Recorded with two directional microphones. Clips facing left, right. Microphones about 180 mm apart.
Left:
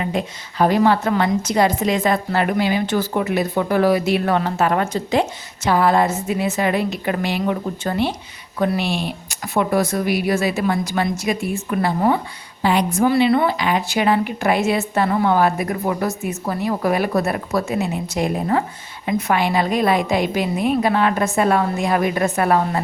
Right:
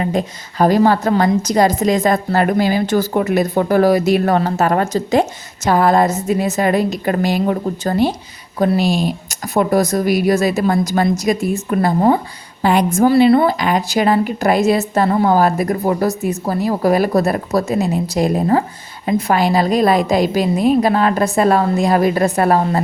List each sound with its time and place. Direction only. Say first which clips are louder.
0.0 s a woman's voice: right 4 dB; 40° right (ahead or behind)